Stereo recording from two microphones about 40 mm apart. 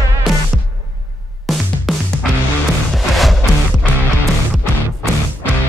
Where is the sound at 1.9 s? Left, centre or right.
Centre.